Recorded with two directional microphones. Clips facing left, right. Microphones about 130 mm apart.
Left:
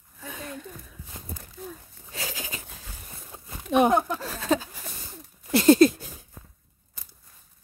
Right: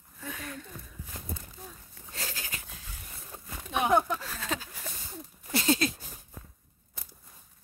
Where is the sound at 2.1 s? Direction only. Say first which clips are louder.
Left 4 dB; 90° left.